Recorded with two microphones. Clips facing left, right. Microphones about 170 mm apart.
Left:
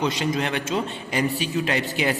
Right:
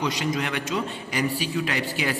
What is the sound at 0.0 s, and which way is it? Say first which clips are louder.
A man's voice: left 2 dB; 25° left (ahead or behind).